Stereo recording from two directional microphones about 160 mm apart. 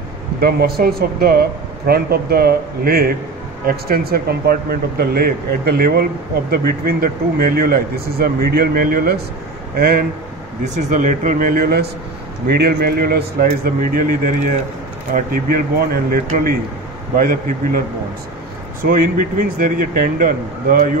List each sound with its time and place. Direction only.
0.4 s speech: 75° right (ahead or behind)
10.6 s speech: 50° right (ahead or behind); by 13.5 s 75° right (ahead or behind)
13.9 s speech: 60° right (ahead or behind)